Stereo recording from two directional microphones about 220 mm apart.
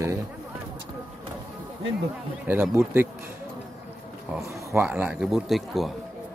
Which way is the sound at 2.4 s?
10° right (ahead or behind).